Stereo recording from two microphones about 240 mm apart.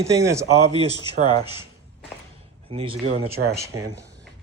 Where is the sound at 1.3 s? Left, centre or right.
Right.